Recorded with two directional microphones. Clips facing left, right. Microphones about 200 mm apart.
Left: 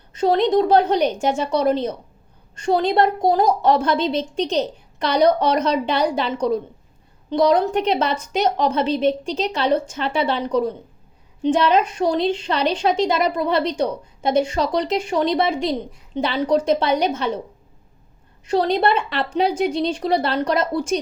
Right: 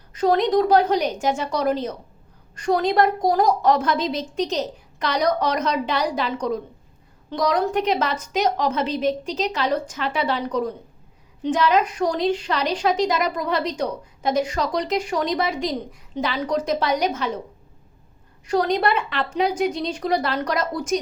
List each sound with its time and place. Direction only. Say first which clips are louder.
0.1 s a woman's voice: left 2 dB; 25° left (ahead or behind)
18.4 s a woman's voice: left 2 dB; 30° left (ahead or behind)